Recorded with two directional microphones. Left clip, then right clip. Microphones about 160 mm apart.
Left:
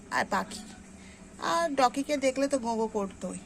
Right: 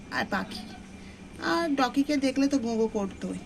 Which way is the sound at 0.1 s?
30° left (ahead or behind).